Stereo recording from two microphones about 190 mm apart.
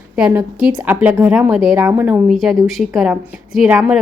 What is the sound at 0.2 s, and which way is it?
A woman's voice, 10° right (ahead or behind).